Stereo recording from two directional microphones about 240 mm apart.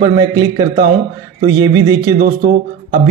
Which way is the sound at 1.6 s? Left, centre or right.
Centre.